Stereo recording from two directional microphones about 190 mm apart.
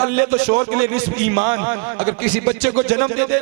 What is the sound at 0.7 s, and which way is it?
A man's voice, 15° right (ahead or behind).